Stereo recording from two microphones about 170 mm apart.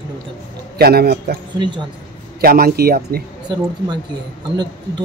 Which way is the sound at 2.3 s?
65° right (ahead or behind).